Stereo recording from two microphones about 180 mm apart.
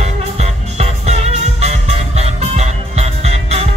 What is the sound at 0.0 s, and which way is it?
Music, 40° right (ahead or behind).